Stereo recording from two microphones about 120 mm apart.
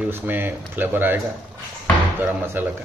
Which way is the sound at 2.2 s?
15° right (ahead or behind).